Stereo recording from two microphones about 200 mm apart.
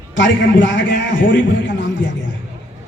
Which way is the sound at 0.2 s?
65° left (ahead or behind).